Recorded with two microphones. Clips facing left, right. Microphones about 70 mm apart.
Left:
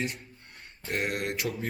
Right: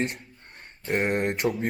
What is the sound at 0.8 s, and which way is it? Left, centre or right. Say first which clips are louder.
Speech: right 6 dB; right.